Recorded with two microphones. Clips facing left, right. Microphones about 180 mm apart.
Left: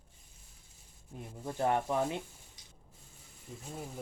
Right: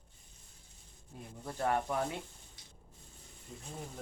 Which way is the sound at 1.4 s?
20° left (ahead or behind).